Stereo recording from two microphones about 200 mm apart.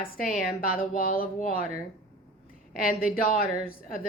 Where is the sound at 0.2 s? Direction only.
45° left (ahead or behind).